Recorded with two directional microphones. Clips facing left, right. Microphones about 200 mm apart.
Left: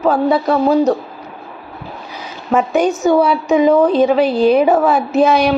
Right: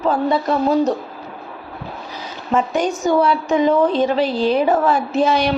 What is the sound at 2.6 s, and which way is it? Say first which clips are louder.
A woman's voice: left 5 dB; 5° left (ahead or behind).